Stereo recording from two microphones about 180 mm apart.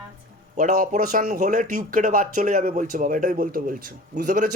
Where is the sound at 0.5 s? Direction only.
45° right (ahead or behind).